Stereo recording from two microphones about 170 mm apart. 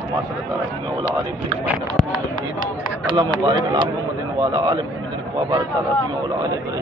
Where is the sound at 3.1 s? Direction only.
25° right (ahead or behind).